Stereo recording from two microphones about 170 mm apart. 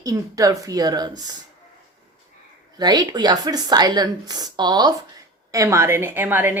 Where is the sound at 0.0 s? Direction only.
20° right (ahead or behind).